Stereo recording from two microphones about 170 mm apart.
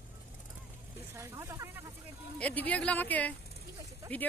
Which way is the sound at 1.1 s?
15° right (ahead or behind).